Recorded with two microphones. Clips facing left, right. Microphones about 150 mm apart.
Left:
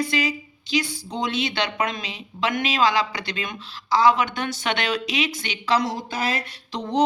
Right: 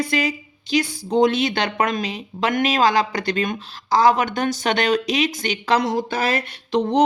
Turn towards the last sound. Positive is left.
turn(degrees=-60)  # may be behind; listen again after turning